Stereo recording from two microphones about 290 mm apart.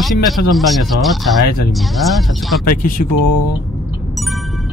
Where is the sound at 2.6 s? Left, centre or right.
Left.